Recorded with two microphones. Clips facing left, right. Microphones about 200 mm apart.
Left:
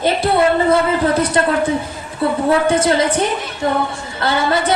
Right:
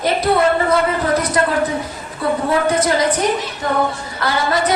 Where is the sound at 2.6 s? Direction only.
25° left (ahead or behind).